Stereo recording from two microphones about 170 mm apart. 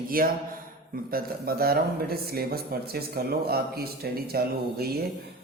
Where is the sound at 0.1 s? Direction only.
60° right (ahead or behind).